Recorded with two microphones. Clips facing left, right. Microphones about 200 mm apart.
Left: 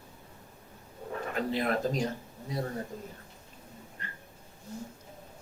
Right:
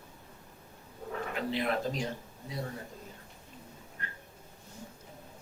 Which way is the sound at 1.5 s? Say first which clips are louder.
Left 2 dB; 45° left (ahead or behind).